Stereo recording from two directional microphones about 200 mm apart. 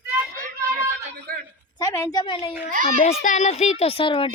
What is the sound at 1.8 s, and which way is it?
Speech, 15° left (ahead or behind).